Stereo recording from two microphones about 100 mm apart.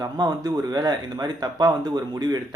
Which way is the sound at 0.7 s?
40° right (ahead or behind).